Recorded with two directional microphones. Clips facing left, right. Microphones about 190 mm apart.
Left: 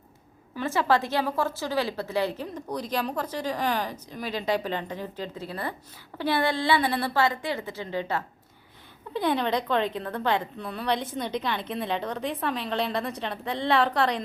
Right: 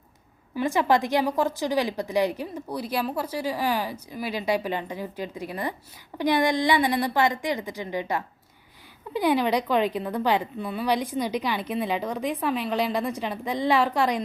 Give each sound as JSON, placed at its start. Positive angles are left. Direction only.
{"t": 0.5, "sound": "a woman's voice", "side_deg": -15}